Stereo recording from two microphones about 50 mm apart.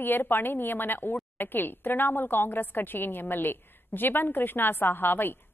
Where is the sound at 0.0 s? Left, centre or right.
Left.